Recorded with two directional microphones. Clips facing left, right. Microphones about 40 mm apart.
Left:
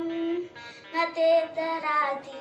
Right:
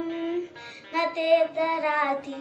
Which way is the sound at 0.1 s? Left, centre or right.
Centre.